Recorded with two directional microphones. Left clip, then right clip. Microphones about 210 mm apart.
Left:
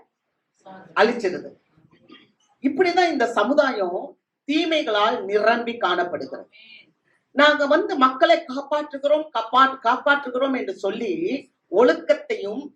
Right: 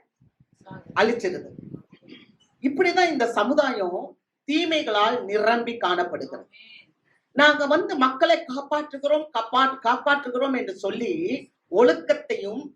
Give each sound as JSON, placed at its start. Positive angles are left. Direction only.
{"t": 2.6, "sound": "speech", "side_deg": -30}